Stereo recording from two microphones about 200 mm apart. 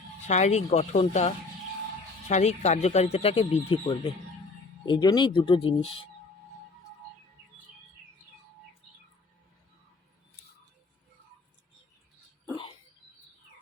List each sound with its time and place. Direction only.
0.3 s speech: 35° left (ahead or behind)